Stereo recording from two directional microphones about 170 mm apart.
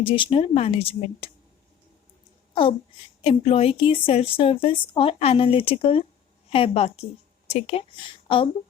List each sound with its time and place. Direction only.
0.0 s a woman's voice: 30° left (ahead or behind)
3.2 s a woman's voice: 35° left (ahead or behind)